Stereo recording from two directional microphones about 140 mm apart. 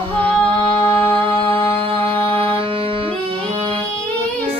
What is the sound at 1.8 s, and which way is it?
Music, 40° right (ahead or behind).